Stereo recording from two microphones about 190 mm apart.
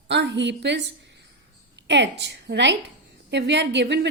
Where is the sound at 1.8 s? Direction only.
65° right (ahead or behind).